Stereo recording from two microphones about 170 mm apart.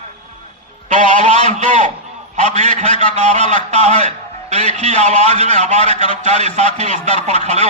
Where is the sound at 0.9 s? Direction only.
45° right (ahead or behind).